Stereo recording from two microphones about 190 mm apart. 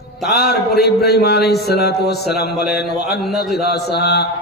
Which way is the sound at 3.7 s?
60° left (ahead or behind).